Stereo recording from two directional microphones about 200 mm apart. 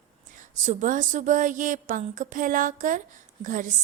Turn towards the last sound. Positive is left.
turn(degrees=-40)  # may be behind; listen again after turning